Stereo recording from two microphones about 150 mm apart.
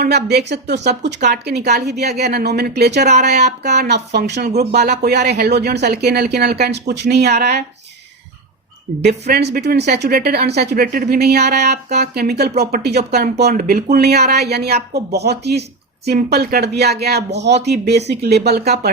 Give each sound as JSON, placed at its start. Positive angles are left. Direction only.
{"t": 0.3, "sound": "speech", "side_deg": -90}
{"t": 9.0, "sound": "speech", "side_deg": -90}